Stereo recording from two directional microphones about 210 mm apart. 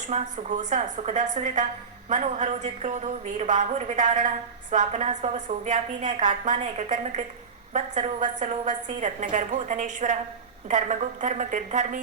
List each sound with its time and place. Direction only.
0.1 s a woman's voice: 30° right (ahead or behind)